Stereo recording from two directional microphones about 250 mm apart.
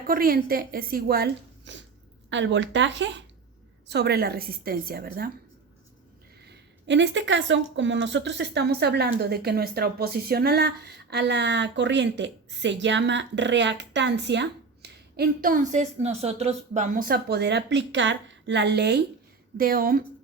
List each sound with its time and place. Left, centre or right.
0.1 s speech: right
6.5 s speech: right